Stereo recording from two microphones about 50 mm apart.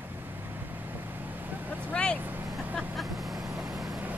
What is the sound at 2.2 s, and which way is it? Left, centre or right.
Vehicle, right.